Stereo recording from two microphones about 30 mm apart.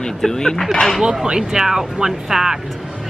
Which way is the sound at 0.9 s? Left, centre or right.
Right.